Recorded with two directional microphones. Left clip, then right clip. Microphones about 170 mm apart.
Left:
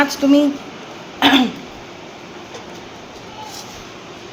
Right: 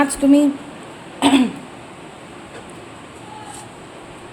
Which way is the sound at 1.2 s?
20° right (ahead or behind).